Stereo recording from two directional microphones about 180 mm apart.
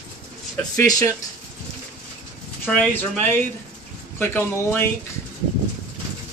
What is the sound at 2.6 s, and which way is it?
Speech, 10° left (ahead or behind).